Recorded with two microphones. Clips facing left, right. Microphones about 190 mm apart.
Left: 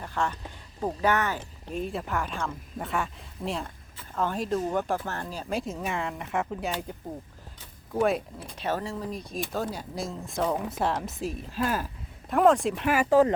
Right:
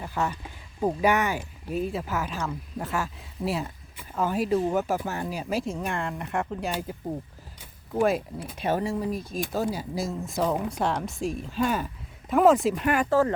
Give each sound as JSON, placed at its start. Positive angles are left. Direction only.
{"t": 0.0, "sound": "speech", "side_deg": -10}
{"t": 8.4, "sound": "speech", "side_deg": -10}
{"t": 13.1, "sound": "speech", "side_deg": 20}